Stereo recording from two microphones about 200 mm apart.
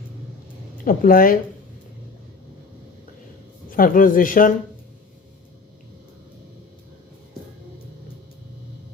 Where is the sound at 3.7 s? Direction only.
45° left (ahead or behind).